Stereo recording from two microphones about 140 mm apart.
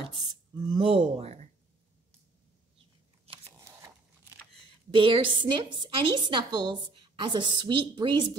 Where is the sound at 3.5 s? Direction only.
20° right (ahead or behind).